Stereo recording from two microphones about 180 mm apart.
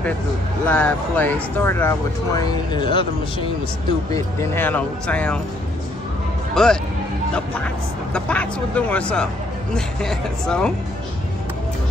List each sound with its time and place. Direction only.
0.7 s speech: 5° left (ahead or behind); by 3.4 s 25° left (ahead or behind)
4.1 s speech: 15° left (ahead or behind)
6.5 s speech: 5° left (ahead or behind)